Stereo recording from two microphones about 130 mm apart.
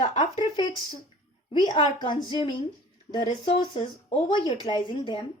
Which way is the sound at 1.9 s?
35° left (ahead or behind).